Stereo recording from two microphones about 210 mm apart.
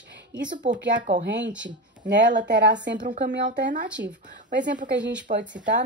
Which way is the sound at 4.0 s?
55° right (ahead or behind).